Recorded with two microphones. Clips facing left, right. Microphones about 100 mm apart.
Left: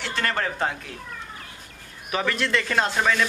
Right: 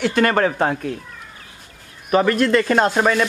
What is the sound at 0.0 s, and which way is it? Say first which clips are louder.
Speech: right 10 dB; 55° right (ahead or behind).